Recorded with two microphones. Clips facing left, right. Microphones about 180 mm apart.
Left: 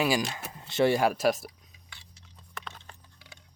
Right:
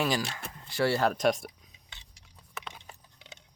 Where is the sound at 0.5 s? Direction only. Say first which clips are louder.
Left 4 dB; 20° left (ahead or behind); by 1.5 s 5° left (ahead or behind).